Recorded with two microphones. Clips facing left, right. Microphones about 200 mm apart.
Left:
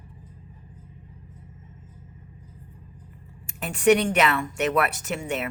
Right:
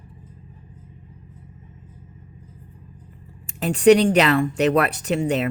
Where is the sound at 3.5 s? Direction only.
35° right (ahead or behind).